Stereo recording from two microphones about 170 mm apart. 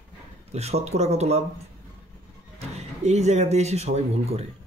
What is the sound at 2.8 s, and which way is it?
Speech, 40° right (ahead or behind).